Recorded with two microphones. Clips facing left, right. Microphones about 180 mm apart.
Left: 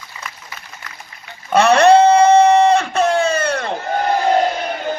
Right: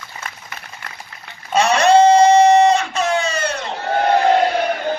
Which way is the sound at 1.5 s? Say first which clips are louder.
Left 4 dB; 60° left (ahead or behind).